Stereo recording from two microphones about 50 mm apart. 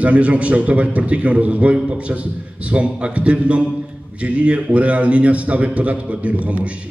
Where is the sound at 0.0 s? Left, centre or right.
Right.